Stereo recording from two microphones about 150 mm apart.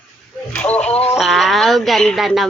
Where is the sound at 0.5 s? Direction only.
10° left (ahead or behind).